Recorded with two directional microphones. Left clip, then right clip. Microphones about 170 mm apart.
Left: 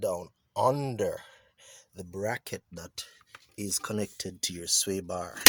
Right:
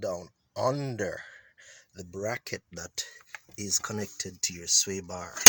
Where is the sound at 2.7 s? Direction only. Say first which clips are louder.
Right 4 dB; 10° right (ahead or behind).